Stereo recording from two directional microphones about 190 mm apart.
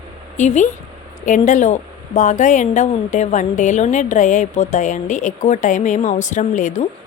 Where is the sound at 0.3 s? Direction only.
40° left (ahead or behind).